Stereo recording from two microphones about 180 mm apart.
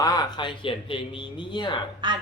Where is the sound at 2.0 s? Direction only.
25° right (ahead or behind).